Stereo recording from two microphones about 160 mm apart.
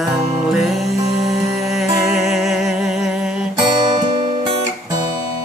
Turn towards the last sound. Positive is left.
turn(degrees=-25)  # may be behind; listen again after turning